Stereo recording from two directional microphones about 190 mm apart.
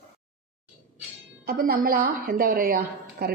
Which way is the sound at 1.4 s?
50° right (ahead or behind).